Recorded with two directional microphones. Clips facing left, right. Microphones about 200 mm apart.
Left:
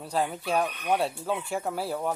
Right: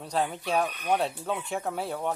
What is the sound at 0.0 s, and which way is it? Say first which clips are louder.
Speech: even; centre (ahead or behind).